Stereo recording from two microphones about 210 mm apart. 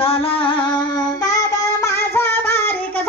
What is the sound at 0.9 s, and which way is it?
Child singing, 20° left (ahead or behind).